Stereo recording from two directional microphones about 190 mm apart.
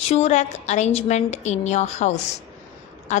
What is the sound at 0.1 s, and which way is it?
A woman's voice, 35° left (ahead or behind).